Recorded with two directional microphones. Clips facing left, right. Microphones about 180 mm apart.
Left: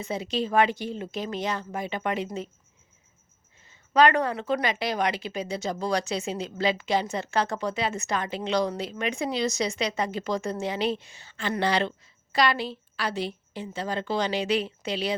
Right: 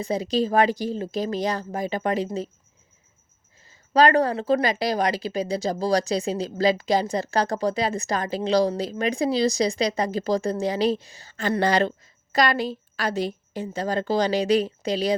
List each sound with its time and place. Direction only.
0.0 s speech: 35° right (ahead or behind)
3.7 s speech: 35° right (ahead or behind)